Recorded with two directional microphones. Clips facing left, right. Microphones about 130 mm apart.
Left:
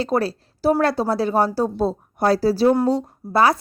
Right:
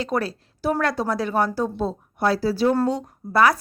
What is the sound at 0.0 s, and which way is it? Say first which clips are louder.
Speech: left 4 dB; 35° left (ahead or behind).